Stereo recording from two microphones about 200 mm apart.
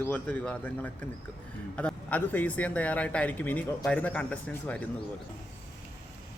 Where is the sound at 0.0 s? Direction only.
5° left (ahead or behind).